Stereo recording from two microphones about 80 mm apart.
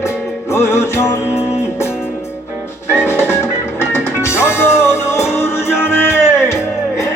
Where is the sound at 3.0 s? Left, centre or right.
Left.